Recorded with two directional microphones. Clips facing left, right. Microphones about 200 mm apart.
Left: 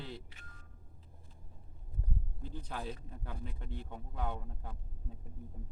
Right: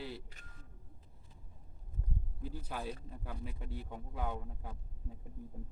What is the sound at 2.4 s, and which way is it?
A man's voice, 5° right (ahead or behind).